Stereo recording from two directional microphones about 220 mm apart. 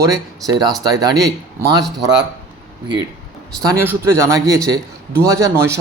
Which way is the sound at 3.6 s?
10° right (ahead or behind).